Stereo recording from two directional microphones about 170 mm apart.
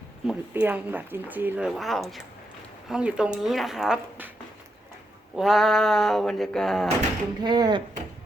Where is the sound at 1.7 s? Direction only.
Centre (ahead or behind).